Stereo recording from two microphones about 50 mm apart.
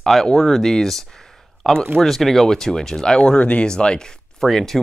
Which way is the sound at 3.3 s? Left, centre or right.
Left.